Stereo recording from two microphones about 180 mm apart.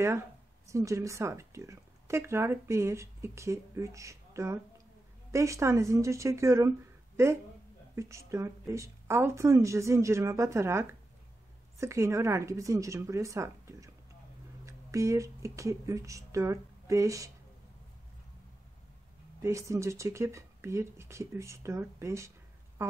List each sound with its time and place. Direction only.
0.7 s a woman's voice: 15° right (ahead or behind)
7.9 s speech: 15° right (ahead or behind)
19.4 s speech: 15° right (ahead or behind)